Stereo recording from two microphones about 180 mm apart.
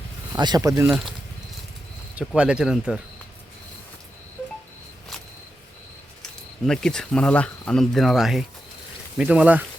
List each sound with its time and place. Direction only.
0.3 s speech: 20° right (ahead or behind)
0.9 s speech: centre (ahead or behind)
2.1 s speech: 5° right (ahead or behind)
6.7 s speech: 5° left (ahead or behind)